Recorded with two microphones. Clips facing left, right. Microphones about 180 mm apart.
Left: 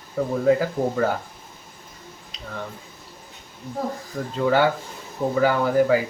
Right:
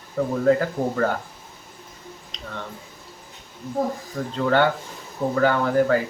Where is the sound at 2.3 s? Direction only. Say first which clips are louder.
Even; 5° left (ahead or behind).